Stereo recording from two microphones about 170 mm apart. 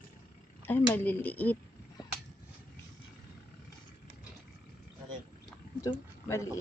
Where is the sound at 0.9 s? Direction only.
10° left (ahead or behind).